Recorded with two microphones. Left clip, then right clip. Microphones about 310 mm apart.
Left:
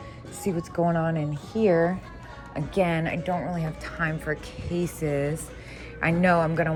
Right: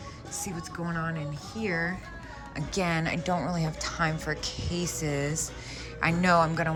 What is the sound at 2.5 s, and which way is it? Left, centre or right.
A woman's voice, centre.